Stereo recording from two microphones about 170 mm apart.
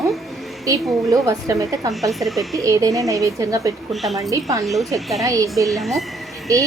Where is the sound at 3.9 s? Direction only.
Centre (ahead or behind).